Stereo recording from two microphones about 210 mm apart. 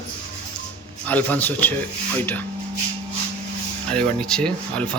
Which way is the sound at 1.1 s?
5° left (ahead or behind).